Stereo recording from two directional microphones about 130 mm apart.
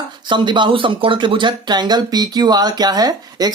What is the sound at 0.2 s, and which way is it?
Speech, 35° right (ahead or behind).